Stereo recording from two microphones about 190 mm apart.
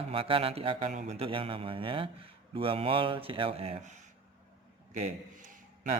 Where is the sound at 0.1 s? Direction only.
30° right (ahead or behind).